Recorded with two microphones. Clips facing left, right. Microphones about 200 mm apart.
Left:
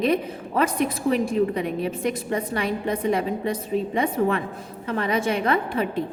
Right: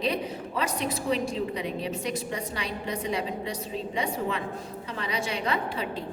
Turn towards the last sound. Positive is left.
turn(degrees=55)  # may be behind; listen again after turning